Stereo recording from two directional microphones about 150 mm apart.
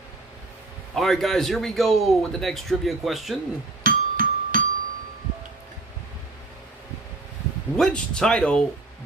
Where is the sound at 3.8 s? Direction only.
65° right (ahead or behind).